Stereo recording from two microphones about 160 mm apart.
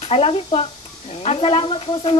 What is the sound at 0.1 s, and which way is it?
A woman's voice, 35° left (ahead or behind).